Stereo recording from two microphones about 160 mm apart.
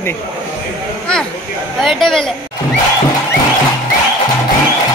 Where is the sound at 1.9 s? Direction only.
5° left (ahead or behind).